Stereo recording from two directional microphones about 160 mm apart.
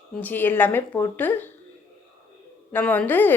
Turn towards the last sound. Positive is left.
turn(degrees=10)  # may be behind; listen again after turning